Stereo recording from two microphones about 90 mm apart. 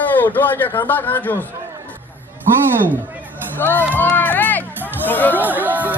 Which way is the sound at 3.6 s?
20° left (ahead or behind).